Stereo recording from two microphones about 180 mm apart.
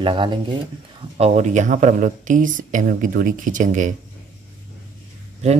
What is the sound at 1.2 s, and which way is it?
Speech, 40° right (ahead or behind).